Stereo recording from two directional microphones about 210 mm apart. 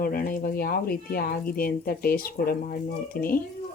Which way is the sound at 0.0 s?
45° left (ahead or behind).